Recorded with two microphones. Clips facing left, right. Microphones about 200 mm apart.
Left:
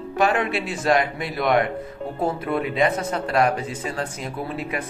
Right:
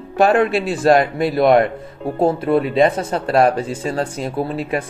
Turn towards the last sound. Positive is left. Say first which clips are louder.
# right 7 dB
turn(degrees=-30)  # may be behind; listen again after turning